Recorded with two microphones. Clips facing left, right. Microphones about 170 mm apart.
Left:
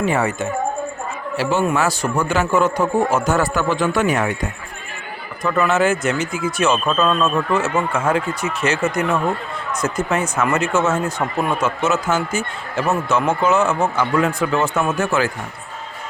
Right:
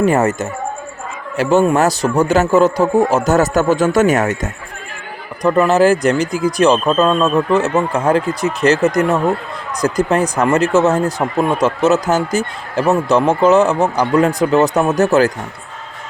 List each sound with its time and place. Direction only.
0.0 s a man's voice: 45° right (ahead or behind)
5.4 s speech: 35° right (ahead or behind)
9.8 s speech: 35° right (ahead or behind)